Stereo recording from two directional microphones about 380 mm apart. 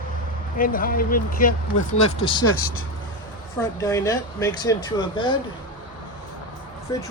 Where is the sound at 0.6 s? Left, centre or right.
Left.